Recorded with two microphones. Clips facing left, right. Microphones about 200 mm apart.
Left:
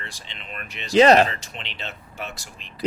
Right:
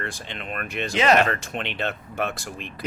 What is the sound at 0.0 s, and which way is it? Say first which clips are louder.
Speech: right 8 dB; 55° right (ahead or behind).